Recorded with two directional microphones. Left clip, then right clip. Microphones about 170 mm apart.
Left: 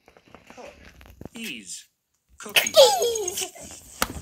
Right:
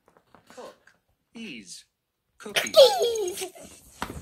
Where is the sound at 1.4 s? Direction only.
10° left (ahead or behind).